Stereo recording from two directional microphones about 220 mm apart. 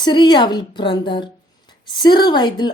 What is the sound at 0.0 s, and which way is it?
A woman's voice, 20° left (ahead or behind).